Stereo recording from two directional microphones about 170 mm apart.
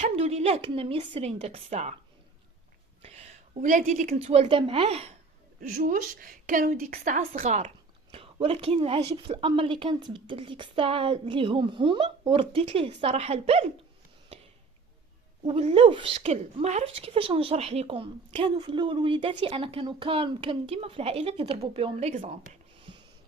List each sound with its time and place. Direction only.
0.0 s a woman's voice: 35° right (ahead or behind)
3.0 s a woman's voice: 40° right (ahead or behind)
5.5 s a woman's voice: 55° right (ahead or behind); by 13.7 s 35° right (ahead or behind)
15.4 s a woman's voice: 35° right (ahead or behind)